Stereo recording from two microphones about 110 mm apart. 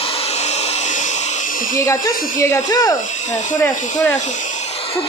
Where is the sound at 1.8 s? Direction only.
30° left (ahead or behind).